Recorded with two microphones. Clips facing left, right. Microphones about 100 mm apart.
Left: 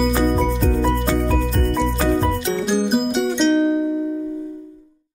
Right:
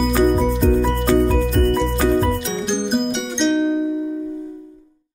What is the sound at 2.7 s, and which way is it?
Music, 5° left (ahead or behind).